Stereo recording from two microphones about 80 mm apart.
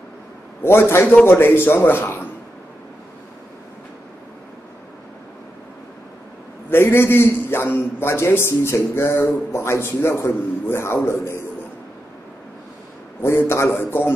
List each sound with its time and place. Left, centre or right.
0.6 s a man's voice: left
6.7 s a man's voice: left
13.2 s a man's voice: left